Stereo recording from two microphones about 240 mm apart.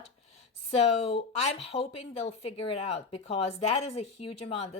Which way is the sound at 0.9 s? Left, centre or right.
Left.